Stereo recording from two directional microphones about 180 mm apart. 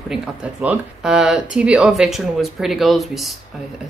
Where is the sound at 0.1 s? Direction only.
5° right (ahead or behind).